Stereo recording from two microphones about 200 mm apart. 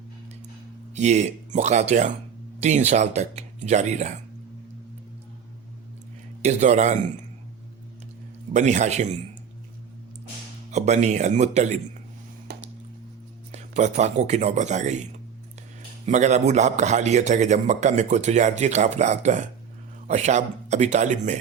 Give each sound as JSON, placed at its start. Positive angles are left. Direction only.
{"t": 0.9, "sound": "a man's voice", "side_deg": -35}
{"t": 6.4, "sound": "a man's voice", "side_deg": -35}
{"t": 8.5, "sound": "a man's voice", "side_deg": -35}
{"t": 10.7, "sound": "a man's voice", "side_deg": -35}
{"t": 12.5, "sound": "a sound", "side_deg": -55}
{"t": 13.5, "sound": "a man's voice", "side_deg": -35}
{"t": 16.0, "sound": "a man's voice", "side_deg": -35}